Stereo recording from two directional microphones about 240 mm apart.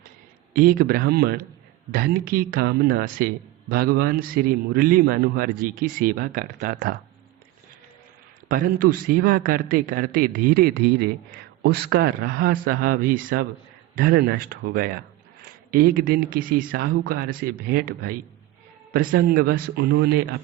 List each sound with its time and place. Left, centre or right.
0.5 s speech: right
8.4 s speech: right